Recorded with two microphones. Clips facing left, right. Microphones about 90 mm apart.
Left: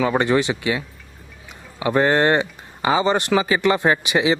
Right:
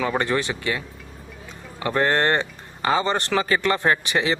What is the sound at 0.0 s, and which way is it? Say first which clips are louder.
Speech: left 5 dB; 15° left (ahead or behind).